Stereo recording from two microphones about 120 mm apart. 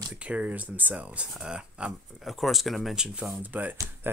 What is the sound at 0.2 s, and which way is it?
Speech, 10° right (ahead or behind).